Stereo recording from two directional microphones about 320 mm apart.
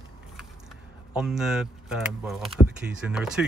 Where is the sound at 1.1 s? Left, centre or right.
Centre.